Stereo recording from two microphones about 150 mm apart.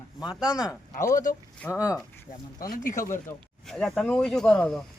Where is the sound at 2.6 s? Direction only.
70° left (ahead or behind).